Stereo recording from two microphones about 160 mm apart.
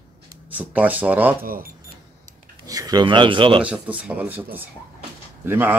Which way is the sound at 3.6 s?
10° right (ahead or behind).